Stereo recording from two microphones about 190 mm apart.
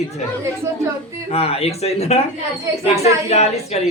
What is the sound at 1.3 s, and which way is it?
A man's voice, 30° left (ahead or behind).